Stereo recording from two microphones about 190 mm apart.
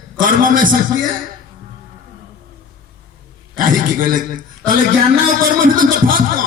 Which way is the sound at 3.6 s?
45° right (ahead or behind).